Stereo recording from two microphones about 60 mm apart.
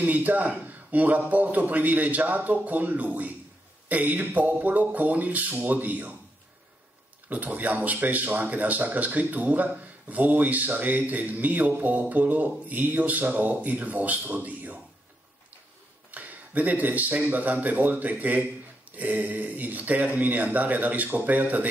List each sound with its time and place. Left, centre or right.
0.0 s speech: right
7.2 s speech: right
16.1 s speech: right